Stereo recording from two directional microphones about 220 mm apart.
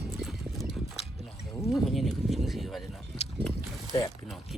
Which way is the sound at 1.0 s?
25° left (ahead or behind).